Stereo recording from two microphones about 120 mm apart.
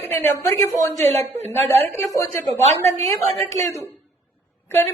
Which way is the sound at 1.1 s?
65° right (ahead or behind).